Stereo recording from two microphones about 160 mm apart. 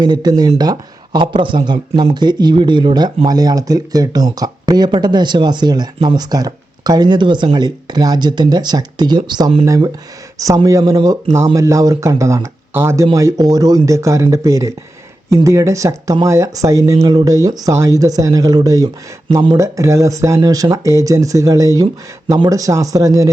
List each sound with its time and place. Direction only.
0.0 s speech: 25° right (ahead or behind)
9.6 s speech: 20° right (ahead or behind)